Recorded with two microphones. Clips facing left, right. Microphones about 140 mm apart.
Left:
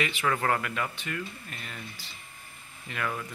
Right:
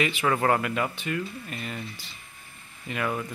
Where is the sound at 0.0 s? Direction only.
25° right (ahead or behind).